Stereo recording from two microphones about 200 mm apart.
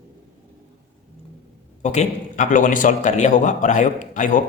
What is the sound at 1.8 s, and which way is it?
A man's voice, 35° left (ahead or behind).